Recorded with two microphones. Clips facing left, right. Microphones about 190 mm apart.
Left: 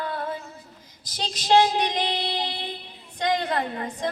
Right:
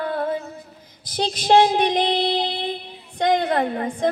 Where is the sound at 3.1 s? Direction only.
55° right (ahead or behind).